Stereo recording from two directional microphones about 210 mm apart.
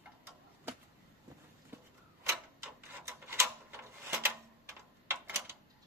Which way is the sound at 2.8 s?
15° right (ahead or behind).